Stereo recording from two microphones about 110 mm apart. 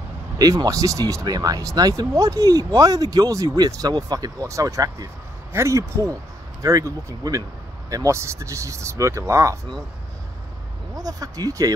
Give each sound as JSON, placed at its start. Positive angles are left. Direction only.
{"t": 0.4, "sound": "speech", "side_deg": -35}
{"t": 11.0, "sound": "speech", "side_deg": -35}